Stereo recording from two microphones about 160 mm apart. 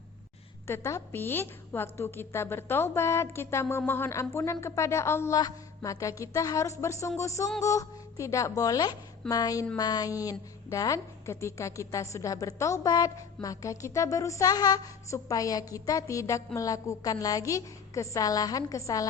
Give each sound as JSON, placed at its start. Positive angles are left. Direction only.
{"t": 0.7, "sound": "a woman's voice", "side_deg": 15}